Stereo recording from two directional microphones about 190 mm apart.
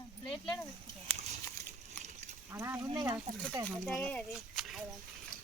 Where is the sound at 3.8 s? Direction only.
5° left (ahead or behind).